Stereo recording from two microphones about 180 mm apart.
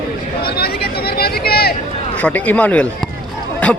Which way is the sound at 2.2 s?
10° left (ahead or behind).